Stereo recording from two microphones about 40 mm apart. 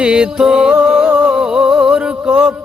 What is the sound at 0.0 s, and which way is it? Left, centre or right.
Music, right.